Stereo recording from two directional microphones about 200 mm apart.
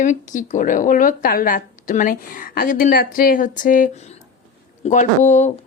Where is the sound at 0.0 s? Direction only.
40° left (ahead or behind).